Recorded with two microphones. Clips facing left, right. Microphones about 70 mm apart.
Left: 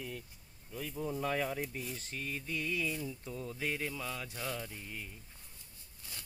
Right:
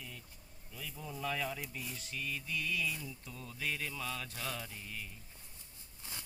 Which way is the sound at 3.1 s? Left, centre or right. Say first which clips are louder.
Left 6 dB; left.